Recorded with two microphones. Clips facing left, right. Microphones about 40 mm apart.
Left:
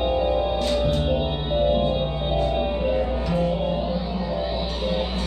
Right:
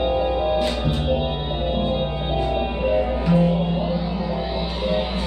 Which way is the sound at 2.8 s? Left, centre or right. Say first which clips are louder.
Right 3 dB; centre.